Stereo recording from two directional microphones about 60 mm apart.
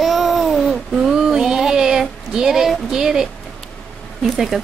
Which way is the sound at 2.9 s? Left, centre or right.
Centre.